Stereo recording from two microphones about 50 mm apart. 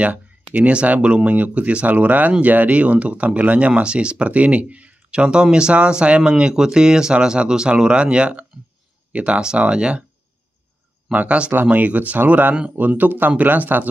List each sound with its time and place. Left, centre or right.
0.0 s speech: right
11.1 s speech: right